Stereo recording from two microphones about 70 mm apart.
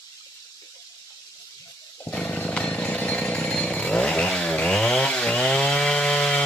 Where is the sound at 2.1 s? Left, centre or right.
Centre.